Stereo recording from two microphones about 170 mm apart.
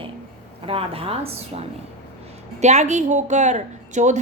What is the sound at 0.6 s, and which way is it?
A woman's voice, 35° right (ahead or behind).